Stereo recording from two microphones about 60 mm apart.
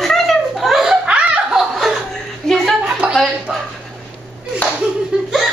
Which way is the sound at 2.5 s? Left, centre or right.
Centre.